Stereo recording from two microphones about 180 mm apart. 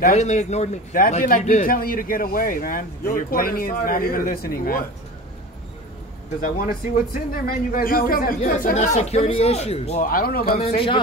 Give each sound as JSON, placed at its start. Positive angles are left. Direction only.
{"t": 0.0, "sound": "a man's voice", "side_deg": 40}
{"t": 6.4, "sound": "a man's voice", "side_deg": 50}
{"t": 8.6, "sound": "speech", "side_deg": 40}
{"t": 9.9, "sound": "speech", "side_deg": 55}
{"t": 10.6, "sound": "speech", "side_deg": 30}